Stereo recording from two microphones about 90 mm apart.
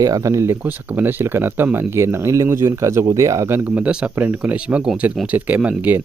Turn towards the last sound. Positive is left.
turn(degrees=-15)  # may be behind; listen again after turning